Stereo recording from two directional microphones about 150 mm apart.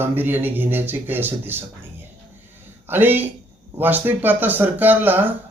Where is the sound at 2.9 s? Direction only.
15° right (ahead or behind).